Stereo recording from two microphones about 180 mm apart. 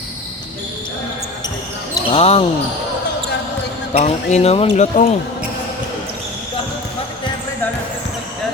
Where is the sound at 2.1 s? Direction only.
35° left (ahead or behind).